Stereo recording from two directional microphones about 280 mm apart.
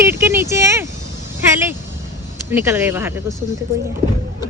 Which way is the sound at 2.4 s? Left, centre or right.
Centre.